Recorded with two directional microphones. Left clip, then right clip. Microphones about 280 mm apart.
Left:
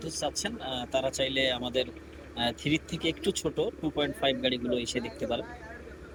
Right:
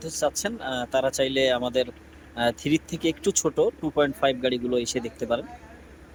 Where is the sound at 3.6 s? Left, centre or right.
Right.